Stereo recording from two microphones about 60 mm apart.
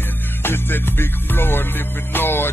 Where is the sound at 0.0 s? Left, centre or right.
Left.